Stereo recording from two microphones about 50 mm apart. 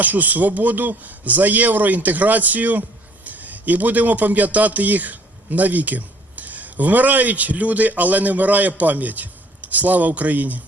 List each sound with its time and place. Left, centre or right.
0.0 s a man's voice: right